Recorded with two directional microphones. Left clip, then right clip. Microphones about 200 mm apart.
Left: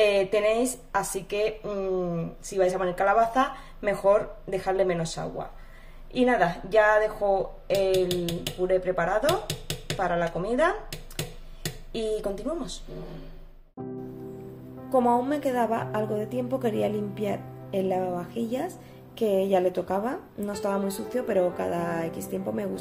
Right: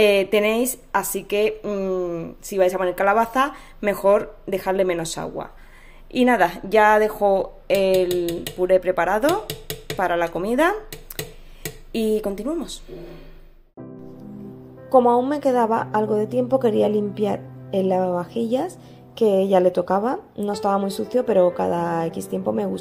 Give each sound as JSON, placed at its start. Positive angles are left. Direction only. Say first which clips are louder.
{"t": 0.0, "sound": "speech", "louder": "right 5 dB", "side_deg": -45}
{"t": 11.9, "sound": "a woman's voice", "louder": "right 7 dB", "side_deg": -40}
{"t": 14.9, "sound": "a woman's voice", "louder": "right 7 dB", "side_deg": -30}